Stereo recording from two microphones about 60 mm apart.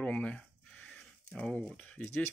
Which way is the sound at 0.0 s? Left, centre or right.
Centre.